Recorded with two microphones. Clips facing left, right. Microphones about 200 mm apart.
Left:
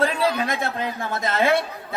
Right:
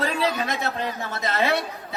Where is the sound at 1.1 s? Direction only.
50° left (ahead or behind).